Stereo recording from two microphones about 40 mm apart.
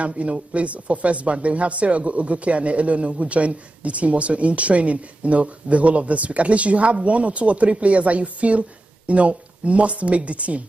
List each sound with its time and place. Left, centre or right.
0.0 s speech: right